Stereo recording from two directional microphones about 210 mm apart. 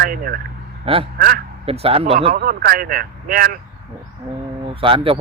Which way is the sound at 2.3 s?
45° right (ahead or behind).